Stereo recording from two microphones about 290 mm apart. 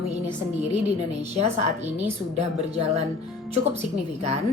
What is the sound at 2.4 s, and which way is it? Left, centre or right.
Speech, right.